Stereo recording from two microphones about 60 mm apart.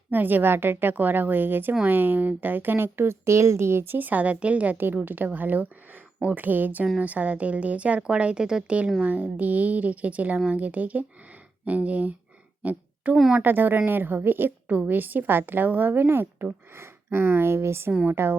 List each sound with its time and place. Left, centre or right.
0.1 s a woman's voice: right